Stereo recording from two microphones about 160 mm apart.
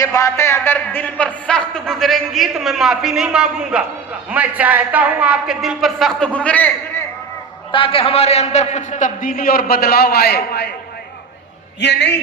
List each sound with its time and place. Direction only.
0.0 s speech: 20° left (ahead or behind)
7.7 s a man's voice: 35° left (ahead or behind); by 10.7 s 80° left
11.8 s a man's voice: 90° left